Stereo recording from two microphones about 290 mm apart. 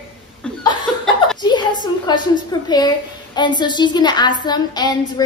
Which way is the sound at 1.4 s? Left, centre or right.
Centre.